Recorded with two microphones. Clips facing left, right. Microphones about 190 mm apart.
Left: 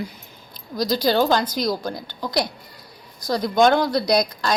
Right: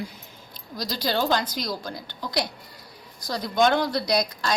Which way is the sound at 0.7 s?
45° left (ahead or behind).